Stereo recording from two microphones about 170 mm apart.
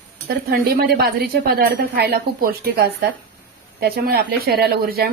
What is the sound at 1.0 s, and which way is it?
Speech, 65° right (ahead or behind).